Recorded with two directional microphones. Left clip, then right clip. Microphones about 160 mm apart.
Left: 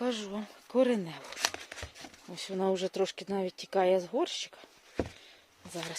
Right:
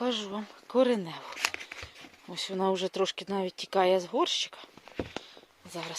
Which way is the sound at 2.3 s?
5° right (ahead or behind).